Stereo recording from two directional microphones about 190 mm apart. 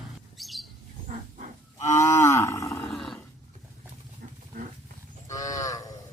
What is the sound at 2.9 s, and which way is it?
Roar, centre (ahead or behind).